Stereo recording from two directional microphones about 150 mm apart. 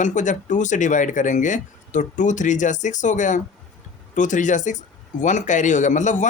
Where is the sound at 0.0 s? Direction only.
55° left (ahead or behind).